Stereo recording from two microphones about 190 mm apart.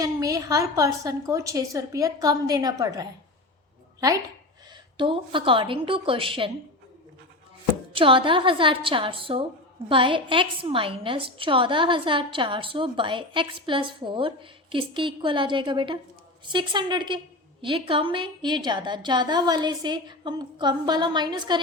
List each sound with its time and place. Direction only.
0.0 s a woman's voice: 20° right (ahead or behind)
4.9 s a woman's voice: 25° right (ahead or behind)
7.9 s a woman's voice: 25° right (ahead or behind)